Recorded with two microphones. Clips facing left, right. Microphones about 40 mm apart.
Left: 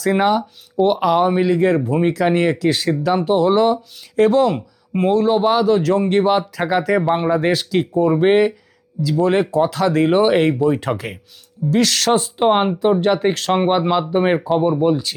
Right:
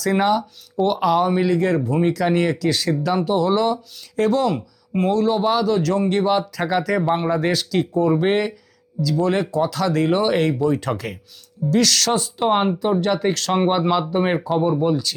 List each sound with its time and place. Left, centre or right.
0.0 s speech: centre
2.9 s speech: centre
14.8 s speech: left